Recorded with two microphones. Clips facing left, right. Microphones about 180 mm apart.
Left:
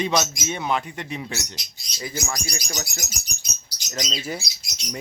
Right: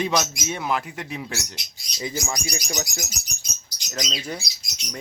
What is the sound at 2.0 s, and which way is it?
Speech, 20° right (ahead or behind).